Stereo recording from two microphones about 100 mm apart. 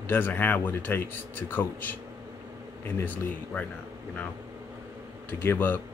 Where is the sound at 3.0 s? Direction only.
15° left (ahead or behind).